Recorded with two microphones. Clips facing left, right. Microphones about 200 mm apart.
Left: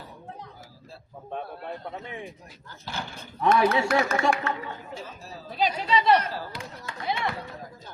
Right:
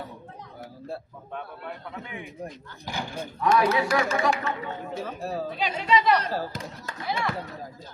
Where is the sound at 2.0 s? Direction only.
35° left (ahead or behind).